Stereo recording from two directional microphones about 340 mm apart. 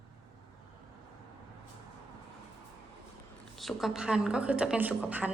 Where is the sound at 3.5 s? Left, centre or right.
Centre.